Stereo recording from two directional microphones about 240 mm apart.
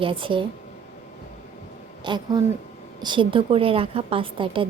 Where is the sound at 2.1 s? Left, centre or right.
Centre.